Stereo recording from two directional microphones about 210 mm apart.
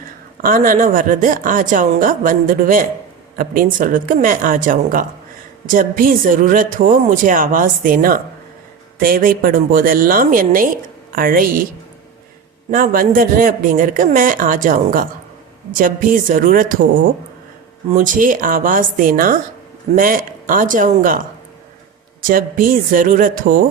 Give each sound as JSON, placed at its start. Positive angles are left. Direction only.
{"t": 0.4, "sound": "a woman's voice", "side_deg": -40}
{"t": 12.7, "sound": "speech", "side_deg": -40}
{"t": 17.9, "sound": "speech", "side_deg": -40}
{"t": 22.3, "sound": "speech", "side_deg": -40}